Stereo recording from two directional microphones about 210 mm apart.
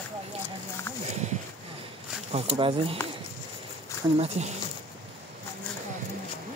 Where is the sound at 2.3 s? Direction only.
25° right (ahead or behind).